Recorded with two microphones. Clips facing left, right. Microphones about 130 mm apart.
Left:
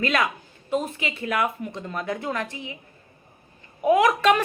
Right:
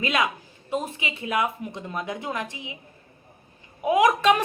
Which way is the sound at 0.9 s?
55° left (ahead or behind).